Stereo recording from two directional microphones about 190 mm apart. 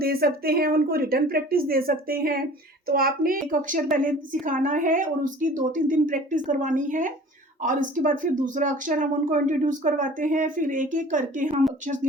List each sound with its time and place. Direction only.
0.0 s speech: 55° right (ahead or behind)